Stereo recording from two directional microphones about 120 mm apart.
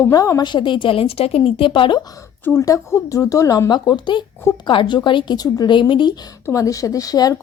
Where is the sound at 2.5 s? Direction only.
25° left (ahead or behind); by 6.1 s 40° left (ahead or behind).